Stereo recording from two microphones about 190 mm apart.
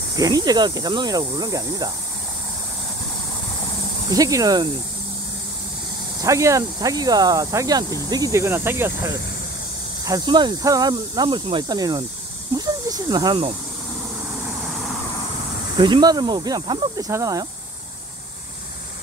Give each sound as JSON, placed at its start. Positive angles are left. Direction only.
{"t": 0.1, "sound": "speech", "side_deg": -20}
{"t": 4.1, "sound": "speech", "side_deg": -20}
{"t": 6.2, "sound": "speech", "side_deg": -15}
{"t": 15.8, "sound": "speech", "side_deg": -20}